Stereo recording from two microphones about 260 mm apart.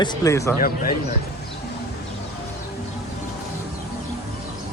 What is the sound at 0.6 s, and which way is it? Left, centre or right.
Speech, left.